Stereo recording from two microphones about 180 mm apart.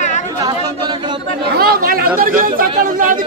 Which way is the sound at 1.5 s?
60° right (ahead or behind).